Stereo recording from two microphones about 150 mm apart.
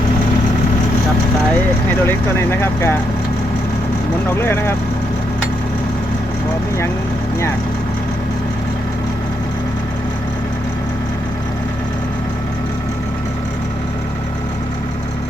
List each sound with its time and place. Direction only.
2.0 s speech: 15° left (ahead or behind)
4.3 s speech: 15° left (ahead or behind)